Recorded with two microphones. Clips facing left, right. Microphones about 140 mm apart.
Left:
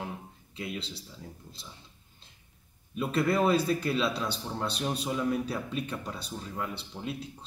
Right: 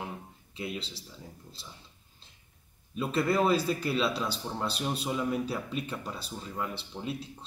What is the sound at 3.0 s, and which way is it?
Speech, centre (ahead or behind).